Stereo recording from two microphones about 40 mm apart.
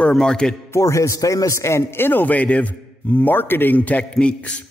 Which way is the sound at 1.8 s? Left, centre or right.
Left.